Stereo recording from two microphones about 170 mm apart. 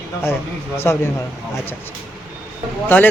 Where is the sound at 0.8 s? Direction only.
15° left (ahead or behind).